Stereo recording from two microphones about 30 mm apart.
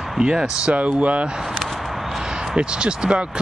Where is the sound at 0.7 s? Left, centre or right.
Right.